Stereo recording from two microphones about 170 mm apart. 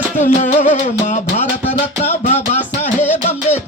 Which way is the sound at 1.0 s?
45° left (ahead or behind).